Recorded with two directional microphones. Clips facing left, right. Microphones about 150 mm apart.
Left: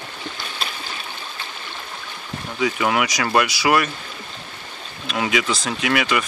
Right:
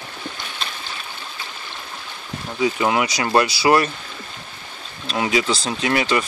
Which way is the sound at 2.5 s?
25° right (ahead or behind).